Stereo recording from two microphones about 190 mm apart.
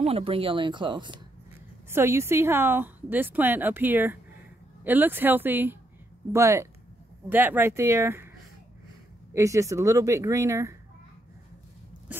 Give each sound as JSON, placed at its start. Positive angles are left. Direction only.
{"t": 0.0, "sound": "speech", "side_deg": -30}
{"t": 1.9, "sound": "a woman's voice", "side_deg": -15}
{"t": 9.3, "sound": "a woman's voice", "side_deg": -15}